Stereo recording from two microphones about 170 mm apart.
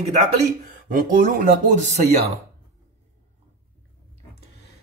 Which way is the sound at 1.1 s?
55° right (ahead or behind).